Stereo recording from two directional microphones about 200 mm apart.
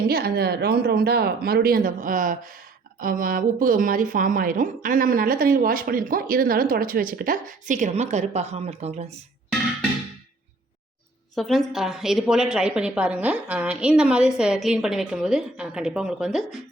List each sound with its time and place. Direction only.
0.1 s a woman's voice: 50° right (ahead or behind); by 9.1 s 30° right (ahead or behind)
11.3 s a woman's voice: centre (ahead or behind)